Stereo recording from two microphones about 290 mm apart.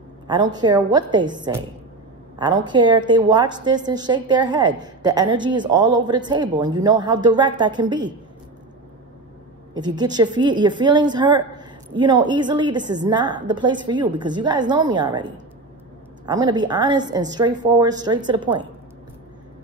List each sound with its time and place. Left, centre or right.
0.3 s a woman's voice: centre
9.8 s a woman's voice: centre
16.3 s a woman's voice: centre